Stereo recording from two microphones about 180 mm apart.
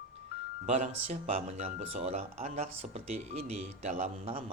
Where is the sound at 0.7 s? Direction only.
40° right (ahead or behind).